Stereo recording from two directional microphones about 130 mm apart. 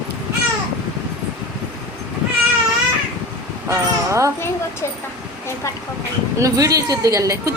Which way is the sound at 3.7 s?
25° right (ahead or behind).